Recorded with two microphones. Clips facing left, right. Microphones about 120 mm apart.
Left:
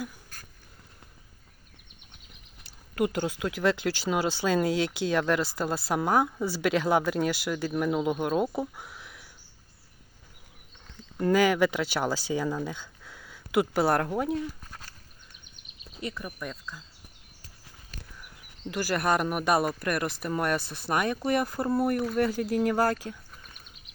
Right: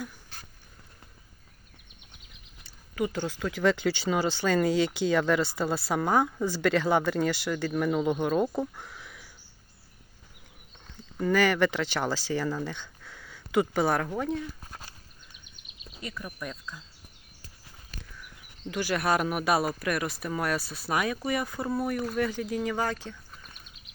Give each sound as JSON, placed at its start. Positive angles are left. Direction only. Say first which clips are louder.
{"t": 3.0, "sound": "a woman's voice", "louder": "left 2 dB", "side_deg": 10}
{"t": 11.3, "sound": "speech", "louder": "left 1 dB", "side_deg": 10}
{"t": 16.0, "sound": "a woman's voice", "louder": "left 2 dB", "side_deg": 0}
{"t": 18.7, "sound": "a woman's voice", "louder": "even", "side_deg": 0}